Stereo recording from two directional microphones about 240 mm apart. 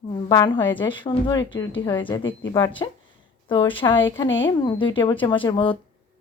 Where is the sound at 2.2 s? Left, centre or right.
Left.